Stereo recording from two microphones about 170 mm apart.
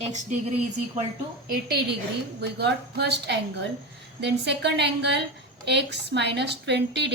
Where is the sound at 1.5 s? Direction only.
65° right (ahead or behind).